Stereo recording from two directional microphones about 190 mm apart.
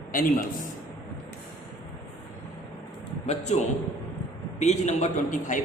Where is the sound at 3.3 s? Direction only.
35° left (ahead or behind).